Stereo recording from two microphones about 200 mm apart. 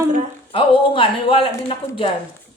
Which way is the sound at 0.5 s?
25° left (ahead or behind).